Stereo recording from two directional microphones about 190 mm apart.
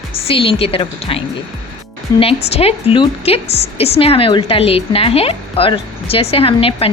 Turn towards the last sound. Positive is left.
turn(degrees=30)  # may be behind; listen again after turning